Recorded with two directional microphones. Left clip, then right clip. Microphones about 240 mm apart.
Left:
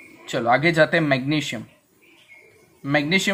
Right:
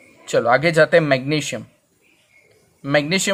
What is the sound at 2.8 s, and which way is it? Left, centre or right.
Speech, right.